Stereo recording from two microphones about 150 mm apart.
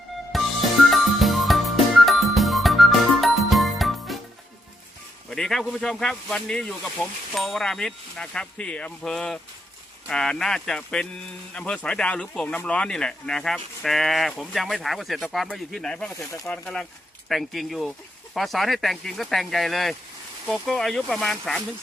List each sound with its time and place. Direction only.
0.3 s music: centre (ahead or behind)
5.3 s speech: 5° left (ahead or behind)
16.1 s speech: 20° left (ahead or behind)
16.5 s speech: 5° left (ahead or behind)